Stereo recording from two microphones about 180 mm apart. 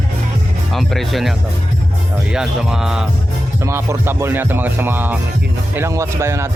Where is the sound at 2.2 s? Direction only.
5° right (ahead or behind).